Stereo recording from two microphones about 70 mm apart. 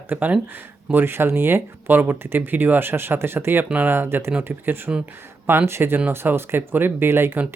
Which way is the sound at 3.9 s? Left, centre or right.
Right.